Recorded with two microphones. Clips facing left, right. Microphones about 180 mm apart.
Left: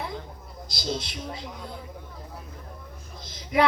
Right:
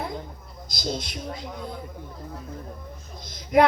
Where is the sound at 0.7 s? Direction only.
45° right (ahead or behind).